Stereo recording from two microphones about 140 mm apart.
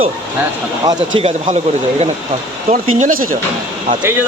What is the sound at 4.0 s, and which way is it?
Speech, 15° right (ahead or behind).